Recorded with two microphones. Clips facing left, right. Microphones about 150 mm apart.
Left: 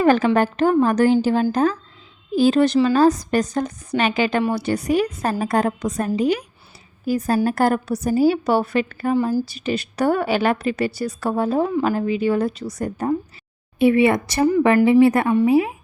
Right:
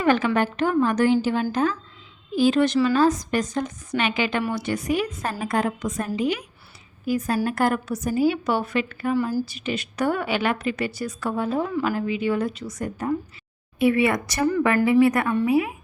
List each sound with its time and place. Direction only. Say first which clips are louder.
0.0 s a woman's voice: left 4 dB; 35° left (ahead or behind)